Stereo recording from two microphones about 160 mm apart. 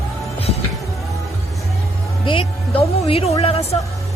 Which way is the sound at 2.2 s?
30° left (ahead or behind).